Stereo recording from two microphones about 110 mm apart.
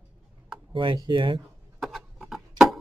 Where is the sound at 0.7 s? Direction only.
50° right (ahead or behind).